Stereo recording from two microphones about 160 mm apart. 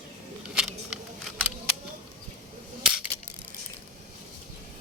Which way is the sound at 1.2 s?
5° right (ahead or behind).